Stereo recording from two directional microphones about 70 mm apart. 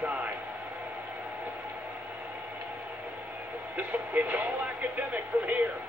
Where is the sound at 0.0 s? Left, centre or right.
Right.